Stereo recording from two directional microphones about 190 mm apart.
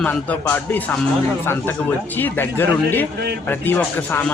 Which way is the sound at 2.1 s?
10° left (ahead or behind).